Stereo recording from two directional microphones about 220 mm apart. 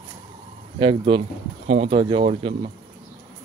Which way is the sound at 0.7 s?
25° right (ahead or behind).